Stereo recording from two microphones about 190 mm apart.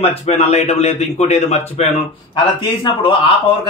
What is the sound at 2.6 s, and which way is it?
Speech, 25° left (ahead or behind).